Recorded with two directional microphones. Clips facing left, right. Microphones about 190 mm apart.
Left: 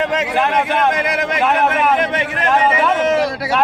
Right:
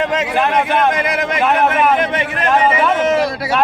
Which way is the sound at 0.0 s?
45° right (ahead or behind).